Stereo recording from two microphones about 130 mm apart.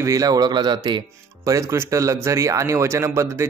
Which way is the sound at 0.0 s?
25° right (ahead or behind).